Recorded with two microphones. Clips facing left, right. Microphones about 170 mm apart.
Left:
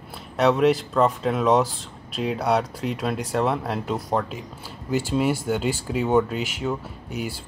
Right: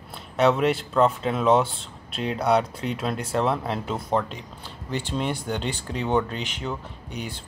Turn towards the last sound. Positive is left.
turn(degrees=5)  # may be behind; listen again after turning